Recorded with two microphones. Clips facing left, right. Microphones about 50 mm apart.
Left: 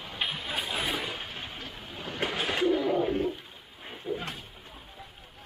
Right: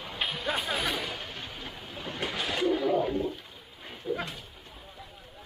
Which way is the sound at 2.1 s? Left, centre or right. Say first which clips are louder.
Left 2 dB; left.